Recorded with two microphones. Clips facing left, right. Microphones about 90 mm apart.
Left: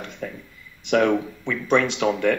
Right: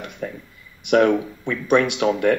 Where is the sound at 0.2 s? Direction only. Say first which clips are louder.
Right 3 dB; 30° right (ahead or behind).